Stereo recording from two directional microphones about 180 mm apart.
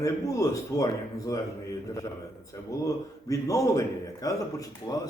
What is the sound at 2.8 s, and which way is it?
A man's voice, 15° left (ahead or behind).